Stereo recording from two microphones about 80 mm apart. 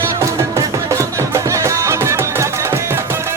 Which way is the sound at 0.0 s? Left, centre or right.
Right.